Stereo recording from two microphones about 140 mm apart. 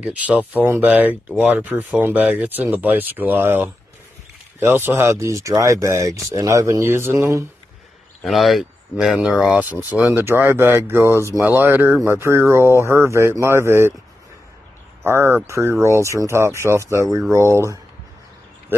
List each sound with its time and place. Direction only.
0.0 s speech: 10° right (ahead or behind)
8.2 s speech: centre (ahead or behind); by 13.9 s 20° right (ahead or behind)
15.0 s speech: 15° right (ahead or behind)